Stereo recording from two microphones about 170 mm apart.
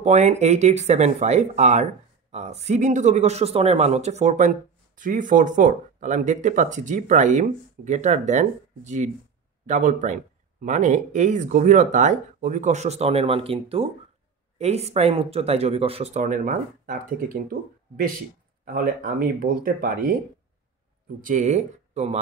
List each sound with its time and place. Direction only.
0.0 s speech: 40° right (ahead or behind); by 20.0 s 60° right (ahead or behind)
21.2 s speech: 50° right (ahead or behind)